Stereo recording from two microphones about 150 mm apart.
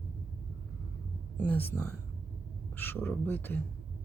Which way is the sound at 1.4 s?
10° left (ahead or behind).